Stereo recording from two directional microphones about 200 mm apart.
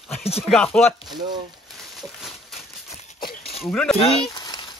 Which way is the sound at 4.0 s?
25° left (ahead or behind).